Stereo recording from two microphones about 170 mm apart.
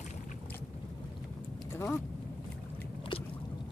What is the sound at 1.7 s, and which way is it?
Vehicle, 15° left (ahead or behind).